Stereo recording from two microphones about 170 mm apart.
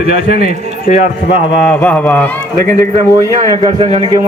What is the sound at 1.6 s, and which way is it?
Speech, 10° left (ahead or behind).